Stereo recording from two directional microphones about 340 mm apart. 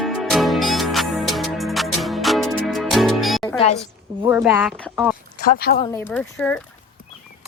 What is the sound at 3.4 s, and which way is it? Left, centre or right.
Speech, centre.